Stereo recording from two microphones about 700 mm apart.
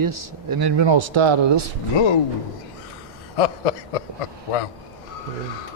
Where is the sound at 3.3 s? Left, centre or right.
Left.